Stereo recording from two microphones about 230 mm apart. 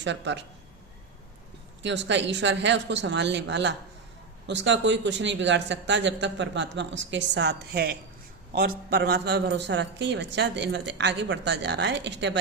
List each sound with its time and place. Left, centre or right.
0.0 s speech: right
1.8 s speech: right